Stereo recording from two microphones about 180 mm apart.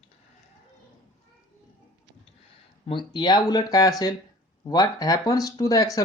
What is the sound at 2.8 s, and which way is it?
Speech, 25° left (ahead or behind).